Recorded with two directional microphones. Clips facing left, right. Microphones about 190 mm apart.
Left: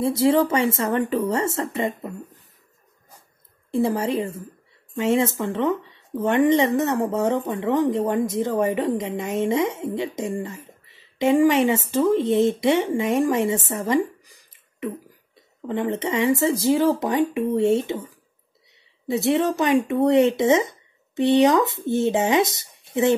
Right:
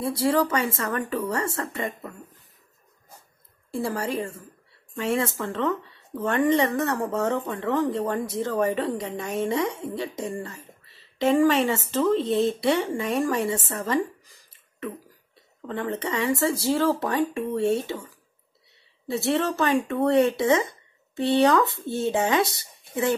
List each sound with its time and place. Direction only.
0.0 s speech: 20° left (ahead or behind)
3.7 s a woman's voice: 20° left (ahead or behind)
15.6 s a woman's voice: 15° left (ahead or behind)